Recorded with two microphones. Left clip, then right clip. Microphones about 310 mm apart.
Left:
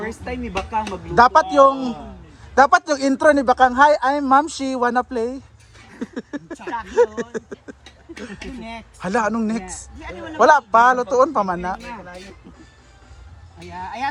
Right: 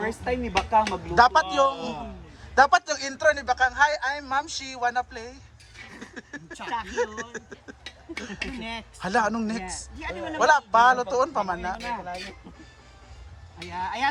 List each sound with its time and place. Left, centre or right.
0.0 s a woman's voice: right
0.9 s a man's voice: centre
11.8 s a woman's voice: right
13.6 s a man's voice: centre